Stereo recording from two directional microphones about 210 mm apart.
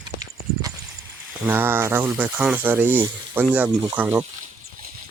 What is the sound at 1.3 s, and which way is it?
Speech, 10° right (ahead or behind).